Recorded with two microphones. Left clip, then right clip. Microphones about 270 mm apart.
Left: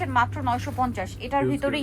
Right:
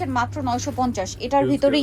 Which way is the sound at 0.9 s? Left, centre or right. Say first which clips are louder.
Right 5 dB; centre.